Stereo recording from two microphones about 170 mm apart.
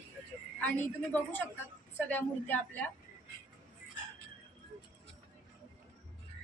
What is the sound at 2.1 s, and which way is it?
Speech, 10° left (ahead or behind).